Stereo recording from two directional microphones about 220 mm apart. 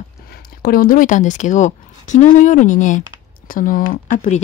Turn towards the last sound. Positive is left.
turn(degrees=35)  # may be behind; listen again after turning